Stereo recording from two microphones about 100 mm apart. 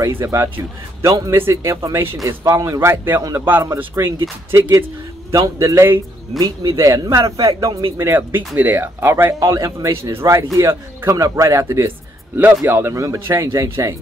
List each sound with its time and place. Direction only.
0.0 s speech: 25° right (ahead or behind)
6.4 s speech: 45° right (ahead or behind); by 13.9 s 30° right (ahead or behind)